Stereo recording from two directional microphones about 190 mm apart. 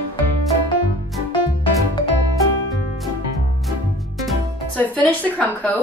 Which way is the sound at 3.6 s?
Centre (ahead or behind).